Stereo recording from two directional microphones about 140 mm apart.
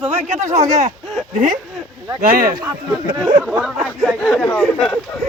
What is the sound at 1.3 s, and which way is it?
Speech, 70° right (ahead or behind).